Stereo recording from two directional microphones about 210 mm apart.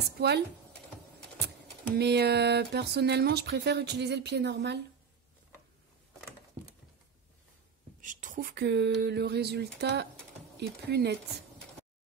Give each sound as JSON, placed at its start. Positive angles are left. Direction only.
{"t": 0.0, "sound": "speech", "side_deg": -50}
{"t": 2.0, "sound": "speech", "side_deg": -50}
{"t": 8.0, "sound": "speech", "side_deg": -40}